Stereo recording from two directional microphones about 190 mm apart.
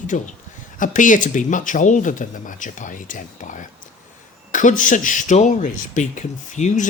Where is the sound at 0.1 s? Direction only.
40° left (ahead or behind).